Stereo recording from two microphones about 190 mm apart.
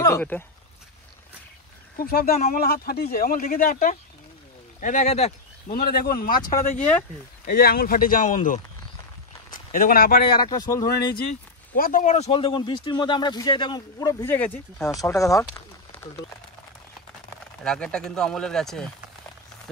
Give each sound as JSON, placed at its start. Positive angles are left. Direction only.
{"t": 0.0, "sound": "speech", "side_deg": 10}
{"t": 2.0, "sound": "speech", "side_deg": 55}
{"t": 2.3, "sound": "speech", "side_deg": 35}
{"t": 2.6, "sound": "speech", "side_deg": 55}
{"t": 5.8, "sound": "speech", "side_deg": 55}
{"t": 10.5, "sound": "speech", "side_deg": 20}
{"t": 11.7, "sound": "speech", "side_deg": 45}
{"t": 17.6, "sound": "speech", "side_deg": 5}